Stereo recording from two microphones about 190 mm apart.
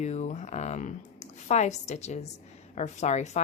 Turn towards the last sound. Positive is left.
turn(degrees=35)  # may be behind; listen again after turning